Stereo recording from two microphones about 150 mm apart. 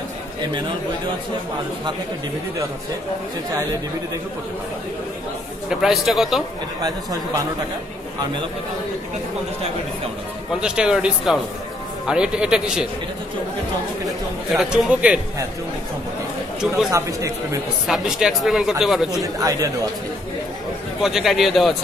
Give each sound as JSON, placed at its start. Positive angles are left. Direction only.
{"t": 5.7, "sound": "speech", "side_deg": 0}
{"t": 10.6, "sound": "speech", "side_deg": -5}
{"t": 14.0, "sound": "speech", "side_deg": -5}
{"t": 16.9, "sound": "speech", "side_deg": -20}
{"t": 17.8, "sound": "speech", "side_deg": -5}
{"t": 19.2, "sound": "speech", "side_deg": -25}
{"t": 21.0, "sound": "speech", "side_deg": 0}